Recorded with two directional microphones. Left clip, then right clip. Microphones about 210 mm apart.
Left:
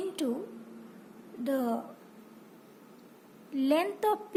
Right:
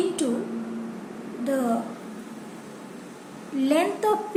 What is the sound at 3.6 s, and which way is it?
Speech, 50° left (ahead or behind).